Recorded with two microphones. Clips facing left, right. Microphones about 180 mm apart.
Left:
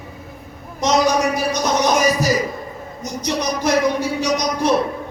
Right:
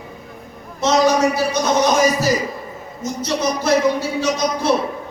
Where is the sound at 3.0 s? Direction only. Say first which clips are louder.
Right 2 dB; 15° left (ahead or behind).